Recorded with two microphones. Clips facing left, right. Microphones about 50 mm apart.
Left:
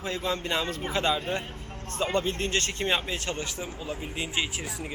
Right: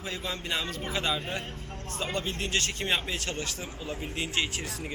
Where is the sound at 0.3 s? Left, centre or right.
Centre.